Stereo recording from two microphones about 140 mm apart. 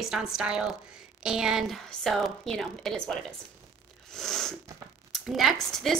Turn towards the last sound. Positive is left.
turn(degrees=5)  # may be behind; listen again after turning